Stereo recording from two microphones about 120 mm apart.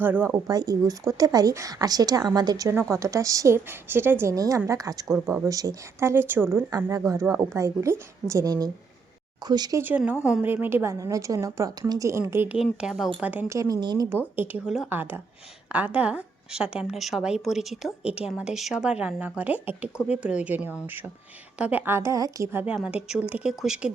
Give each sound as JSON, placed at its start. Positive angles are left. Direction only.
{"t": 0.0, "sound": "a woman's voice", "side_deg": -15}
{"t": 0.4, "sound": "a woman's voice", "side_deg": -30}
{"t": 10.0, "sound": "a woman's voice", "side_deg": -10}
{"t": 12.5, "sound": "a woman's voice", "side_deg": -5}
{"t": 13.5, "sound": "speech", "side_deg": -30}
{"t": 14.3, "sound": "a woman's voice", "side_deg": -15}
{"t": 14.8, "sound": "a woman's voice", "side_deg": -15}
{"t": 22.5, "sound": "a woman's voice", "side_deg": -10}